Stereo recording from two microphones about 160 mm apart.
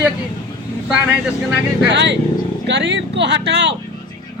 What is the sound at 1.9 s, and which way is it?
Speech, 90° right.